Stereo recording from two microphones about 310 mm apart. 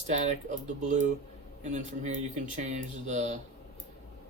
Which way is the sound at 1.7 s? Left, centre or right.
Right.